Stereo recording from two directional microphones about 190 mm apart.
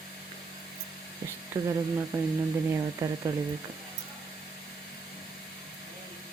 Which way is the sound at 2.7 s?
20° right (ahead or behind).